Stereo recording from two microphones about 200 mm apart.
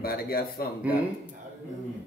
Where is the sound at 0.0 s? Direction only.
50° left (ahead or behind).